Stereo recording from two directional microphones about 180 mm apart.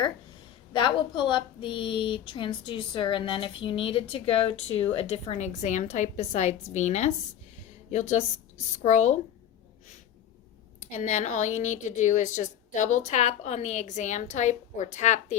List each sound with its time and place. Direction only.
0.7 s a woman's voice: 25° left (ahead or behind)
10.9 s a woman's voice: 40° left (ahead or behind)